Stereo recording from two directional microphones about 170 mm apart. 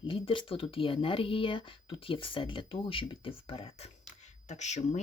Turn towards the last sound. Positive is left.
turn(degrees=45)  # may be behind; listen again after turning